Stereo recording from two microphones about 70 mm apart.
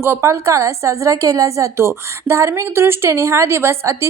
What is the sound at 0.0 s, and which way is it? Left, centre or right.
A woman's voice, right.